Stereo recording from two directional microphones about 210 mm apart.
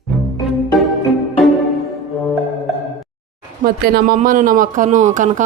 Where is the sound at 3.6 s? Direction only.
40° right (ahead or behind).